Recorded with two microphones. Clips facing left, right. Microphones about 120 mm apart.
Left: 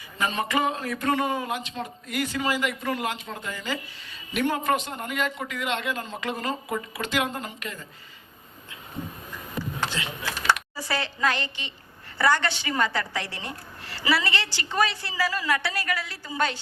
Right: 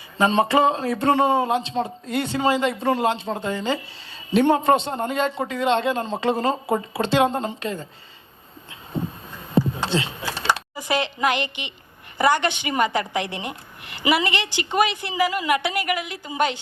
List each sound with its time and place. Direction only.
0.2 s speech: 30° right (ahead or behind)
8.9 s a sound: 30° right (ahead or behind)
10.8 s a woman's voice: 20° right (ahead or behind)